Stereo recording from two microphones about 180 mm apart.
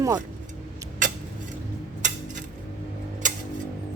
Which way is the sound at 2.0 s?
45° right (ahead or behind).